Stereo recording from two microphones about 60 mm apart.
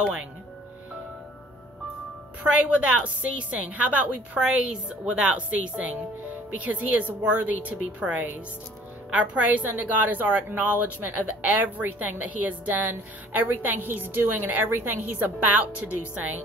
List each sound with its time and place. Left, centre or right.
0.0 s speech: centre
2.5 s a woman's voice: right